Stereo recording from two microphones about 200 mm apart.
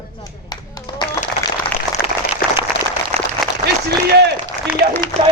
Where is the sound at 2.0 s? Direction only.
Centre (ahead or behind).